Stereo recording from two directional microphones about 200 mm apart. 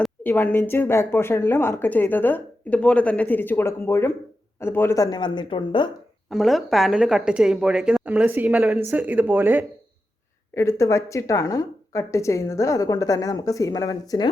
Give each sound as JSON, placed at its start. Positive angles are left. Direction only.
{"t": 0.0, "sound": "a woman's voice", "side_deg": 10}
{"t": 6.3, "sound": "speech", "side_deg": 0}
{"t": 10.5, "sound": "speech", "side_deg": 15}